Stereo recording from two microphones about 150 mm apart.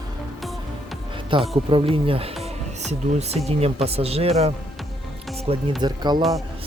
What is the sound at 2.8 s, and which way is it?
Speech, 50° right (ahead or behind).